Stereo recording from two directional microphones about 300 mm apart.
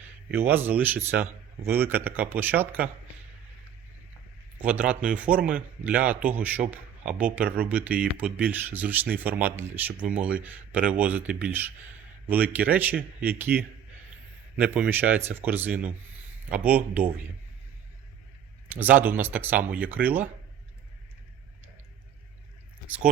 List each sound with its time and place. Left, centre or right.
0.3 s a man's voice: centre
4.5 s a man's voice: centre
18.7 s a man's voice: centre